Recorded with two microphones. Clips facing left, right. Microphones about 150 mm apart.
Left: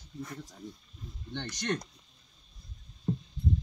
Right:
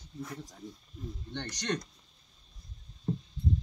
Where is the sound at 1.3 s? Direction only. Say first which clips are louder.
Left 3 dB; 15° right (ahead or behind).